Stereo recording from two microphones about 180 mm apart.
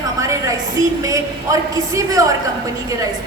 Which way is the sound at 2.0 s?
20° right (ahead or behind).